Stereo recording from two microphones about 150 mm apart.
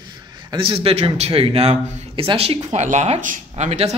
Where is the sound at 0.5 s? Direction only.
35° right (ahead or behind).